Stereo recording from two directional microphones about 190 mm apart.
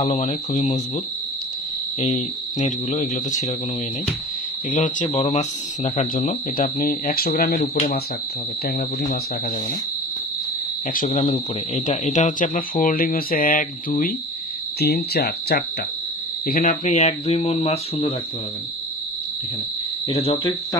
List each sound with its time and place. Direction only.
0.0 s speech: 40° left (ahead or behind)
2.0 s speech: 35° left (ahead or behind)
4.6 s speech: 40° left (ahead or behind)
11.1 s speech: 35° left (ahead or behind)
20.1 s speech: 30° left (ahead or behind)